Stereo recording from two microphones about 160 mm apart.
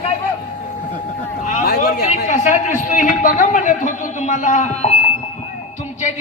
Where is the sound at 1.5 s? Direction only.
65° left (ahead or behind).